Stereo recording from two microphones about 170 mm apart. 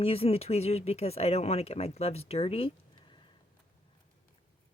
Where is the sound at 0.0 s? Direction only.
35° left (ahead or behind).